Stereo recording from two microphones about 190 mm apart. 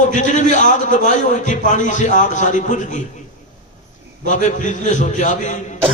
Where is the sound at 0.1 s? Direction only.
40° left (ahead or behind).